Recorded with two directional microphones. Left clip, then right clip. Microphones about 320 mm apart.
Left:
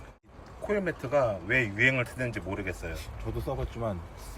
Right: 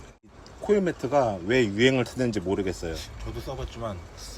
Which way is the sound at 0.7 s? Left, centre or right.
Centre.